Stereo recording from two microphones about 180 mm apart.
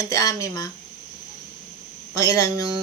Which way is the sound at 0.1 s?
20° left (ahead or behind).